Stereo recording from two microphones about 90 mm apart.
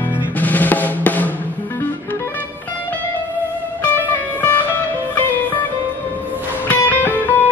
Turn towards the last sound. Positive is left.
turn(degrees=20)  # may be behind; listen again after turning